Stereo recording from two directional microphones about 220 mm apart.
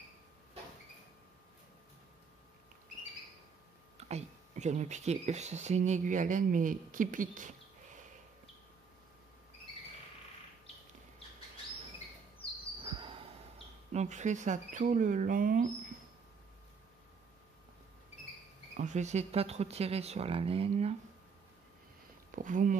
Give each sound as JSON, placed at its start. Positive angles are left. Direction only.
{"t": 4.1, "sound": "speech", "side_deg": -30}
{"t": 12.8, "sound": "cricket", "side_deg": -20}
{"t": 13.9, "sound": "speech", "side_deg": -35}
{"t": 18.8, "sound": "speech", "side_deg": -30}
{"t": 22.3, "sound": "speech", "side_deg": -35}